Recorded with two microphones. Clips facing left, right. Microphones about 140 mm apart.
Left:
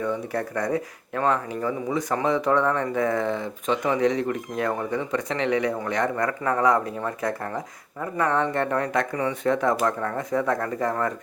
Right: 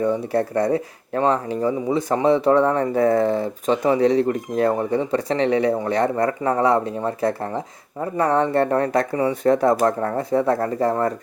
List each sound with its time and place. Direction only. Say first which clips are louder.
0.0 s speech: right 6 dB; 30° right (ahead or behind)